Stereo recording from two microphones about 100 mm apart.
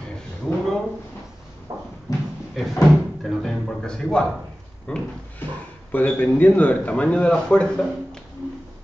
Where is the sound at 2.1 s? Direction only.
40° left (ahead or behind).